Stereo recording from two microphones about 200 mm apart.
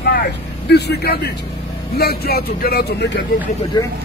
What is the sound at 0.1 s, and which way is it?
Speech, 55° left (ahead or behind).